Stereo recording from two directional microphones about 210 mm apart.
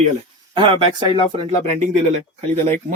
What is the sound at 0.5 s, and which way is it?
Speech, 20° right (ahead or behind).